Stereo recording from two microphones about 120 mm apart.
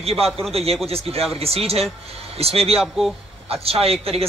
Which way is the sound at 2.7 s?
Centre (ahead or behind).